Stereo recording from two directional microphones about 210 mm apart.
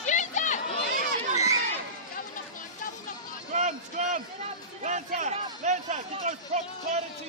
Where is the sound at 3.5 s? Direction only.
35° right (ahead or behind).